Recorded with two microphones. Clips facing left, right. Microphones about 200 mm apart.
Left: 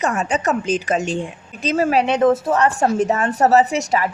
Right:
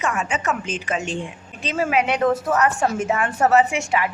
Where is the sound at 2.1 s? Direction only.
20° left (ahead or behind).